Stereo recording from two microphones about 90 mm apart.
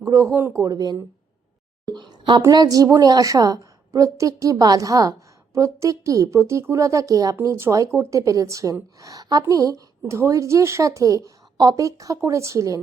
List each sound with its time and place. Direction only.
0.0 s a woman's voice: 35° right (ahead or behind)
1.9 s a sound: 55° right (ahead or behind)
2.5 s a woman's voice: 45° right (ahead or behind)